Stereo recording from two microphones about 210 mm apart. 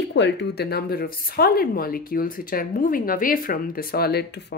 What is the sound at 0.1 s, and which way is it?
Speech, 55° left (ahead or behind).